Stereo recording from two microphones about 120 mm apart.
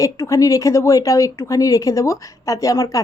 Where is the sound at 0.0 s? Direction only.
25° left (ahead or behind).